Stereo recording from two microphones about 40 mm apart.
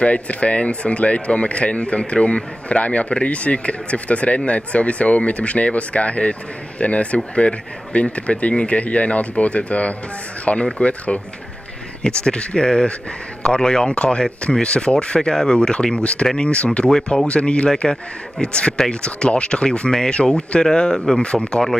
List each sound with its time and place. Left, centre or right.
0.0 s speech: left
12.2 s speech: left